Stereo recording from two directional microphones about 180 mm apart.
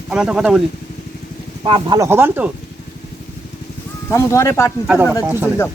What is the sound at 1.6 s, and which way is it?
Speech, 25° right (ahead or behind).